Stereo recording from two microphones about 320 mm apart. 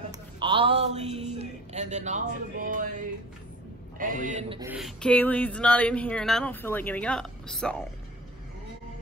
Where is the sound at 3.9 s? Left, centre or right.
Right.